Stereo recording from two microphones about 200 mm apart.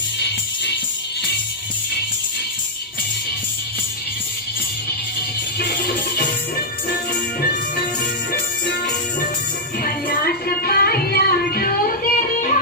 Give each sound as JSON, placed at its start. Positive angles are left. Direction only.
{"t": 0.2, "sound": "music", "side_deg": 55}
{"t": 5.5, "sound": "music", "side_deg": 50}
{"t": 9.8, "sound": "music", "side_deg": 45}